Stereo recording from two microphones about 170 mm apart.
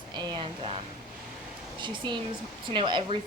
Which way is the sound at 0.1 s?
25° right (ahead or behind).